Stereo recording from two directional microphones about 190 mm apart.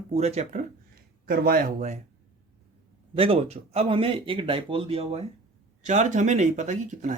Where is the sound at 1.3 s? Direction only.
50° right (ahead or behind).